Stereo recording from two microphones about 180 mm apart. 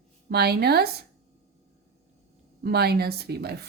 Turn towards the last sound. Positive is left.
turn(degrees=-65)  # may be behind; listen again after turning